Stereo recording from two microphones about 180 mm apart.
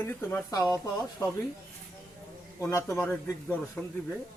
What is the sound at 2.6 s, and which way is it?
A man's voice, 15° left (ahead or behind).